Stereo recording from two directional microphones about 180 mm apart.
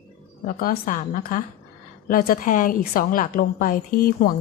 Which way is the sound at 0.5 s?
50° left (ahead or behind).